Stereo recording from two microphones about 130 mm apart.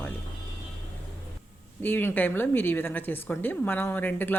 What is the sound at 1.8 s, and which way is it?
A woman's voice, 15° left (ahead or behind).